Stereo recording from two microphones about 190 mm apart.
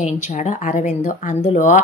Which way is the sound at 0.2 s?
40° left (ahead or behind).